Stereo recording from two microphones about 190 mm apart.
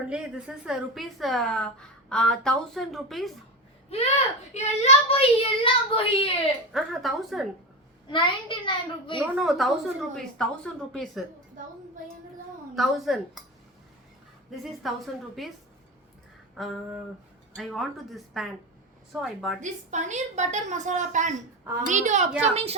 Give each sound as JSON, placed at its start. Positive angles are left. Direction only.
{"t": 0.1, "sound": "a woman's voice", "side_deg": -5}
{"t": 3.8, "sound": "a woman's voice", "side_deg": 30}
{"t": 6.7, "sound": "a woman's voice", "side_deg": 0}
{"t": 8.0, "sound": "a child's voice", "side_deg": 25}
{"t": 9.1, "sound": "a woman's voice", "side_deg": -5}
{"t": 12.7, "sound": "a woman's voice", "side_deg": 0}
{"t": 14.5, "sound": "a woman's voice", "side_deg": 0}
{"t": 16.6, "sound": "a woman's voice", "side_deg": 0}
{"t": 19.6, "sound": "a woman's voice", "side_deg": -40}